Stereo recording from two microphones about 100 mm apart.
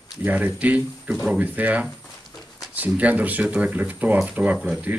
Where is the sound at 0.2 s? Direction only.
15° right (ahead or behind).